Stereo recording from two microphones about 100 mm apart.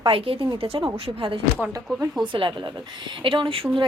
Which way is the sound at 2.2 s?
55° right (ahead or behind).